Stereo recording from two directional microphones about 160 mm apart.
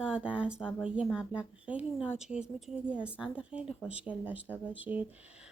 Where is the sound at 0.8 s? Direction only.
5° right (ahead or behind).